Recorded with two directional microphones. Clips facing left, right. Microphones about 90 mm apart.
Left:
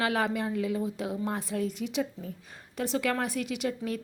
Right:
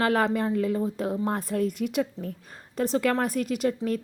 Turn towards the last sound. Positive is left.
turn(degrees=-45)  # may be behind; listen again after turning